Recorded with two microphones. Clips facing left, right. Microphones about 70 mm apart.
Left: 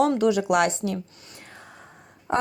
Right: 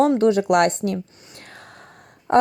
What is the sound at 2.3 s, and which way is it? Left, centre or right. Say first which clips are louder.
Wail: right 8 dB; right.